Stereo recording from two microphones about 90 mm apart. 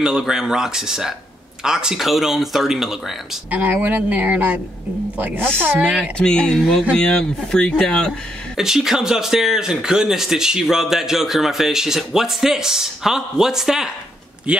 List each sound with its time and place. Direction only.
0.0 s speech: 5° right (ahead or behind)
3.4 s speech: 15° right (ahead or behind)
6.1 s speech: 10° left (ahead or behind)
8.5 s speech: 5° right (ahead or behind)